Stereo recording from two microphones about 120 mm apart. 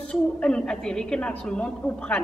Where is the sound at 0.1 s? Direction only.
5° left (ahead or behind).